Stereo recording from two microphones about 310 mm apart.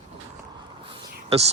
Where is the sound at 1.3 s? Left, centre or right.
Centre.